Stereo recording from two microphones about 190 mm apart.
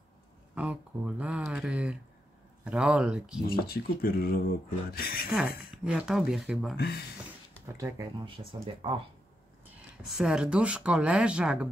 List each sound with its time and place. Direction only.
0.6 s speech: 5° right (ahead or behind)
3.4 s speech: 50° left (ahead or behind)
5.9 s speech: 5° right (ahead or behind)
6.8 s speech: 55° left (ahead or behind)
7.6 s speech: 15° right (ahead or behind)
10.0 s speech: 5° right (ahead or behind)